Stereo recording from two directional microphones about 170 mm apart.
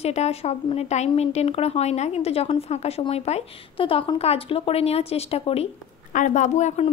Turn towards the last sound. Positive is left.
turn(degrees=45)  # may be behind; listen again after turning